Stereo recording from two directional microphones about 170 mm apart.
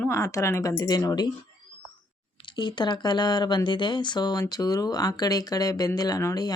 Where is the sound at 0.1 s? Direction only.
15° left (ahead or behind).